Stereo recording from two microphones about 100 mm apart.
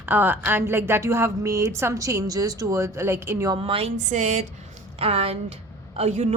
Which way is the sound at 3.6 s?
75° right (ahead or behind).